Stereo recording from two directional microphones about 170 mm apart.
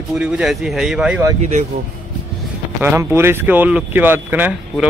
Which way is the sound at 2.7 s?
15° right (ahead or behind).